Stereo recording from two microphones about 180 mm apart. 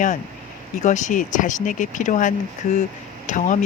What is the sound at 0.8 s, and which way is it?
Speech, 40° left (ahead or behind).